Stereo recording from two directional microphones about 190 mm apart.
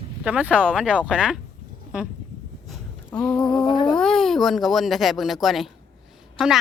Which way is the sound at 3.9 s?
Centre (ahead or behind).